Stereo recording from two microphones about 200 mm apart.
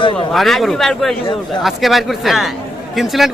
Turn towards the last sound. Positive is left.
turn(degrees=0)  # may be behind; listen again after turning